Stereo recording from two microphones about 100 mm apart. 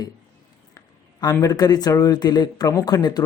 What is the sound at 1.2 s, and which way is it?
Speech, 40° left (ahead or behind).